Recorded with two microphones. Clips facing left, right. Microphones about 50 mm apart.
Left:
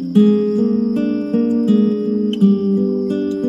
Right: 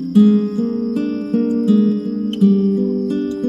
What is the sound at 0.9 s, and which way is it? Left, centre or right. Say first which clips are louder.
Music: left 2 dB; left.